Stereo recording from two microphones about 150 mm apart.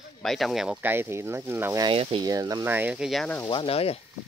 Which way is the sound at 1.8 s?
35° right (ahead or behind).